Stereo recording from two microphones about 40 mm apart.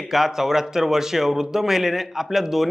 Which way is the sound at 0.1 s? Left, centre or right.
Centre.